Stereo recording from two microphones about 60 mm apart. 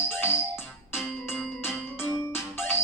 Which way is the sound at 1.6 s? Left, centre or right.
Left.